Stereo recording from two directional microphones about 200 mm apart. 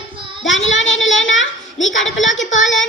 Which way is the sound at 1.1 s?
70° left (ahead or behind).